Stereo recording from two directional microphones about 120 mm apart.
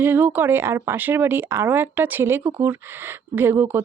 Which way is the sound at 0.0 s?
15° right (ahead or behind).